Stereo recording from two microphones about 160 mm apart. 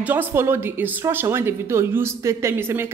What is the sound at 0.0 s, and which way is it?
A woman's voice, 10° right (ahead or behind).